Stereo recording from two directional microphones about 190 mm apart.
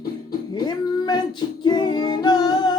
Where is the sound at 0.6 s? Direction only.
20° left (ahead or behind).